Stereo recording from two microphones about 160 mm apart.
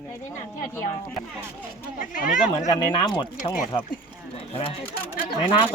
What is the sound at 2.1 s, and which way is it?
Speech, 55° left (ahead or behind).